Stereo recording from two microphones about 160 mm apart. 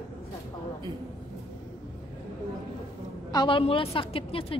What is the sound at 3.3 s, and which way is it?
A woman's voice, 30° left (ahead or behind).